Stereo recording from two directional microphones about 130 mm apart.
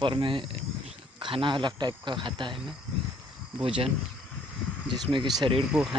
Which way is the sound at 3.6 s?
45° right (ahead or behind).